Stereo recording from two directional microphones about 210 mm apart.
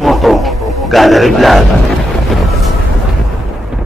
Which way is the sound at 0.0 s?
Centre (ahead or behind).